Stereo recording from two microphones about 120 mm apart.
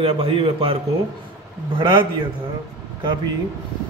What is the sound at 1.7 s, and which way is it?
Speech, 40° right (ahead or behind).